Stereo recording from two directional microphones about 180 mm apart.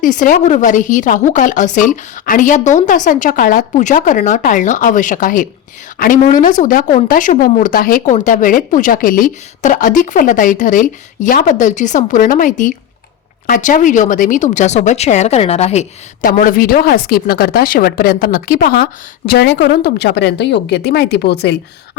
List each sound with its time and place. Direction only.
0.0 s speech: 45° left (ahead or behind); by 21.6 s 65° left (ahead or behind)